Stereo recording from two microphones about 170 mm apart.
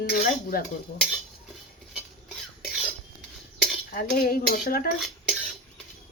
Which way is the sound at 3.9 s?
60° left (ahead or behind).